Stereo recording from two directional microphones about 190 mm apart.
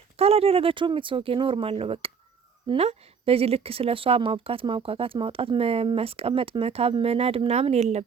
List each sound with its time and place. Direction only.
0.2 s speech: 30° right (ahead or behind)